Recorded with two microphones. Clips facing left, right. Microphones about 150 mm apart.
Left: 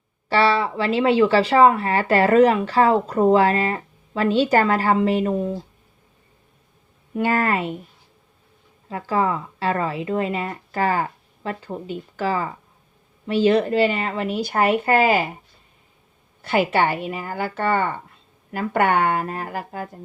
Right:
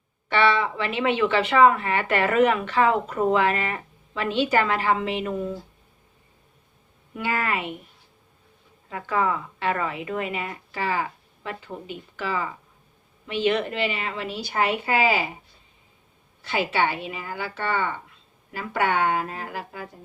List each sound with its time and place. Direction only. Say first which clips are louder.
0.3 s speech: left 3 dB; 35° left (ahead or behind)
7.2 s speech: left 6 dB; 45° left (ahead or behind)
8.9 s a woman's voice: left 3 dB; 30° left (ahead or behind); by 15.3 s 50° left (ahead or behind)
16.4 s a woman's voice: left 5 dB; 55° left (ahead or behind)